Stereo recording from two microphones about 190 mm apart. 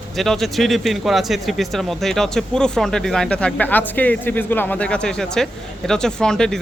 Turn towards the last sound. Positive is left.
turn(degrees=5)  # may be behind; listen again after turning